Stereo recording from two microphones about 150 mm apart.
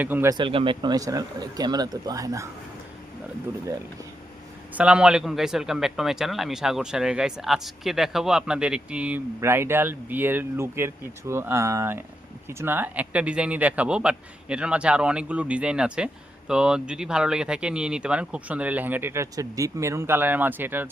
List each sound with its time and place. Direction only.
0.0 s speech: 10° right (ahead or behind)
0.3 s speech: 30° right (ahead or behind)
4.7 s a man's voice: 10° right (ahead or behind)